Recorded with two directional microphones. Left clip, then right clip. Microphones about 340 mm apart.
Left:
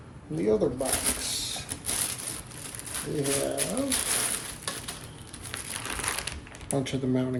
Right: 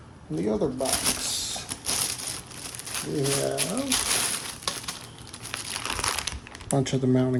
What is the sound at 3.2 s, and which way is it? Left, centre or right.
Speech, centre.